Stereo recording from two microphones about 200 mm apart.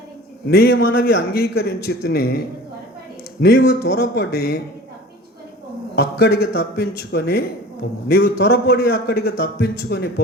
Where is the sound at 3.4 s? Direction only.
50° left (ahead or behind).